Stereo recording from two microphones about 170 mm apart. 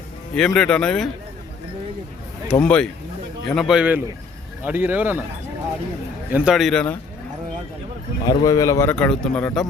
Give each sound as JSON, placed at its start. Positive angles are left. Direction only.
{"t": 0.3, "sound": "speech", "side_deg": 5}
{"t": 2.5, "sound": "a man's voice", "side_deg": 5}
{"t": 6.3, "sound": "speech", "side_deg": -5}
{"t": 8.3, "sound": "a man's voice", "side_deg": 20}